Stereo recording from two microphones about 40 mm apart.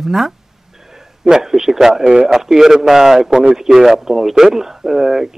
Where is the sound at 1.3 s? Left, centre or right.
Centre.